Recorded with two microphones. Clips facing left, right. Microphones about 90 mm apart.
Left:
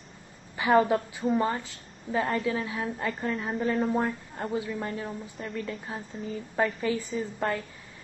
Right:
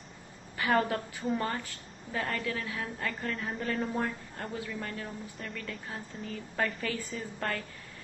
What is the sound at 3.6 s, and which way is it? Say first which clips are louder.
Speech: left 7 dB; 5° left (ahead or behind).